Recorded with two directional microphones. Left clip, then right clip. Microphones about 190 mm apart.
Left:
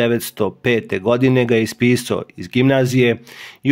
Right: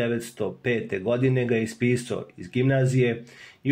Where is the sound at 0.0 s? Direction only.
40° left (ahead or behind).